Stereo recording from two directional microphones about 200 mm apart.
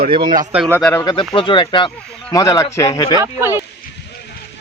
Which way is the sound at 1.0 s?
25° left (ahead or behind).